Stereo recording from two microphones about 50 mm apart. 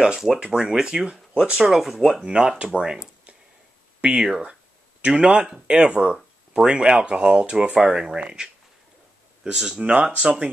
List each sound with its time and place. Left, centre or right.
0.2 s speech: centre
2.2 s speech: centre
9.8 s speech: right